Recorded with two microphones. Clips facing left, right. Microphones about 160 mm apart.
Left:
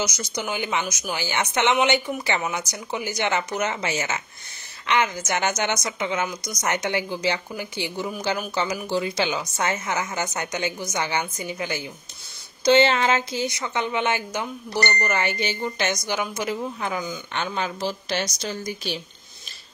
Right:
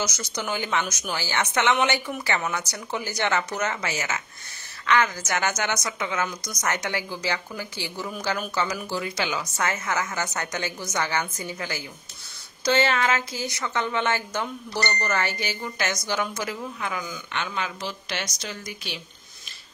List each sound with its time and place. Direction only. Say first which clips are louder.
0.0 s a woman's voice: left 2 dB; 15° left (ahead or behind)
16.8 s a woman's voice: left 3 dB; 25° left (ahead or behind)